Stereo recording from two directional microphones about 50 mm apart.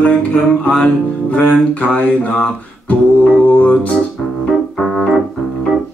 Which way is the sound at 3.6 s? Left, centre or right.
Left.